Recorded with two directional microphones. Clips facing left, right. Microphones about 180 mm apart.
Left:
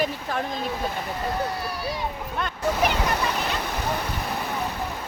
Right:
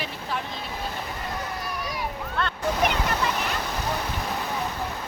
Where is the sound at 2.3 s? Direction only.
5° left (ahead or behind).